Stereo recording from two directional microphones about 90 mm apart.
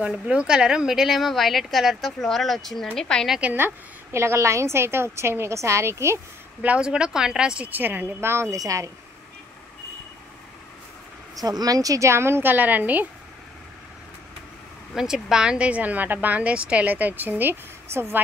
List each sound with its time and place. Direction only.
0.1 s speech: 10° right (ahead or behind); by 3.3 s 10° left (ahead or behind)
3.3 s a woman's voice: 20° right (ahead or behind)
6.6 s a woman's voice: 10° right (ahead or behind); by 8.9 s 40° right (ahead or behind)
11.3 s a woman's voice: 45° right (ahead or behind); by 13.0 s 20° right (ahead or behind)
15.0 s speech: 5° right (ahead or behind); by 18.2 s 25° right (ahead or behind)